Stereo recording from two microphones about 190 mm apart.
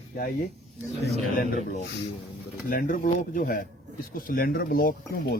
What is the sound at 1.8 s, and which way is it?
Speech, 65° left (ahead or behind).